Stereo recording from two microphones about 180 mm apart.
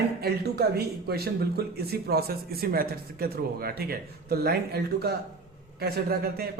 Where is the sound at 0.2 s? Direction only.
60° right (ahead or behind).